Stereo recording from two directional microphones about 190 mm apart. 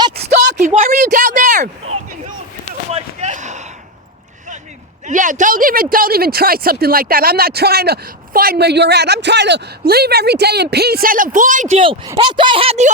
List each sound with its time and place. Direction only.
0.5 s a sound: 40° right (ahead or behind)
5.0 s speech: 40° right (ahead or behind)
11.8 s speech: 25° right (ahead or behind)